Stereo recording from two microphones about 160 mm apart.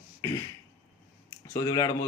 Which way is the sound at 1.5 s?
20° left (ahead or behind).